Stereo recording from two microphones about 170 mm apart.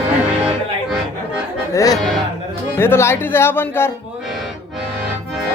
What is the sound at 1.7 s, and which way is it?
Speech, 20° left (ahead or behind).